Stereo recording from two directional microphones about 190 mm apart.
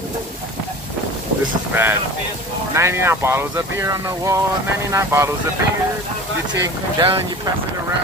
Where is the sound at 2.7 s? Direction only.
15° right (ahead or behind).